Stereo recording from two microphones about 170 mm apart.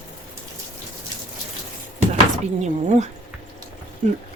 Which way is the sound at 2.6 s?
45° right (ahead or behind).